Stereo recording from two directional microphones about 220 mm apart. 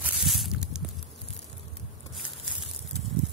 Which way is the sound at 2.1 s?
Centre (ahead or behind).